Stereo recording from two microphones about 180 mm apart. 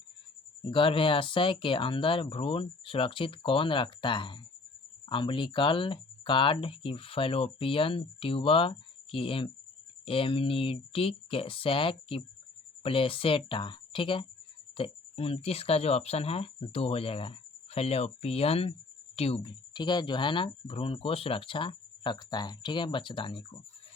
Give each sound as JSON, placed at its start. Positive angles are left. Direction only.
{"t": 0.7, "sound": "speech", "side_deg": 30}